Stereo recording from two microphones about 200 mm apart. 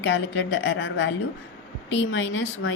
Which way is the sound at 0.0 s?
65° left (ahead or behind).